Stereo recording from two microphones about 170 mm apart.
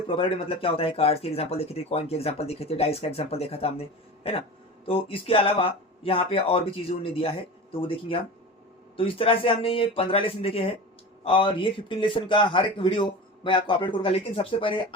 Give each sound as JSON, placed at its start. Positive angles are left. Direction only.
{"t": 0.1, "sound": "speech", "side_deg": 30}